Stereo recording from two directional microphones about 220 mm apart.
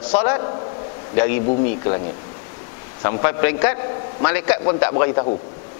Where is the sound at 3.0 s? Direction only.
15° left (ahead or behind).